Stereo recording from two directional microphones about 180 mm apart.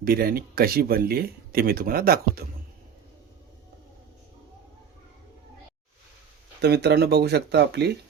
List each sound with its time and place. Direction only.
0.0 s speech: 55° right (ahead or behind)
6.6 s speech: 65° right (ahead or behind)